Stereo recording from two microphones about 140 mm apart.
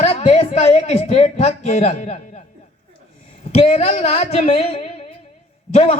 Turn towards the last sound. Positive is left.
turn(degrees=50)  # may be behind; listen again after turning